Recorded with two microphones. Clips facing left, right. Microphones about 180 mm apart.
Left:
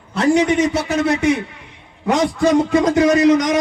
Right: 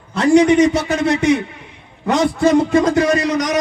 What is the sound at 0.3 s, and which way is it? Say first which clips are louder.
Speech: right 9 dB; 5° left (ahead or behind).